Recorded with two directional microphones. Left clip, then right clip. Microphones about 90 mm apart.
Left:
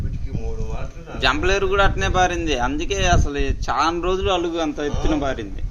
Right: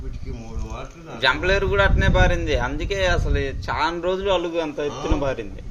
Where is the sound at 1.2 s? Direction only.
65° left (ahead or behind).